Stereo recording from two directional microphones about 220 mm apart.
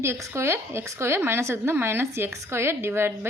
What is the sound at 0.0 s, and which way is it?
Speech, 10° right (ahead or behind).